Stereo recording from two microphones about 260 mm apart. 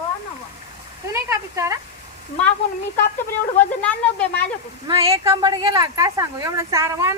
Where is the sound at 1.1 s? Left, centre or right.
Centre.